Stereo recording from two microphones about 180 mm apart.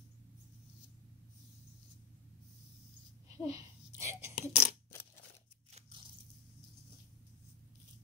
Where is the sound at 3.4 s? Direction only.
15° right (ahead or behind).